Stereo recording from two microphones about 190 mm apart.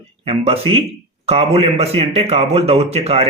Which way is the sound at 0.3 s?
30° right (ahead or behind).